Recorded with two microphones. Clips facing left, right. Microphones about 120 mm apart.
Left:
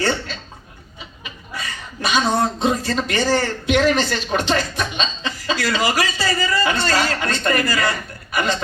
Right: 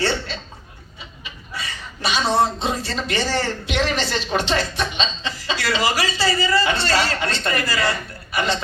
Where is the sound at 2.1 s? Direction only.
45° left (ahead or behind).